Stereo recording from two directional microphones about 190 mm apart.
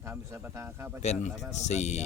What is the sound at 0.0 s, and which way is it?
Speech, 15° right (ahead or behind).